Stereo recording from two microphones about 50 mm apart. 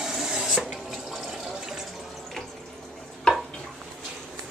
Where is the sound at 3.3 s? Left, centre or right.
Centre.